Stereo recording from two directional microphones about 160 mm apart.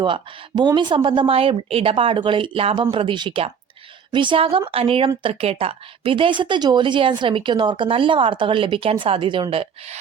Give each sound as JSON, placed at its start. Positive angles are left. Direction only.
{"t": 0.0, "sound": "speech", "side_deg": -30}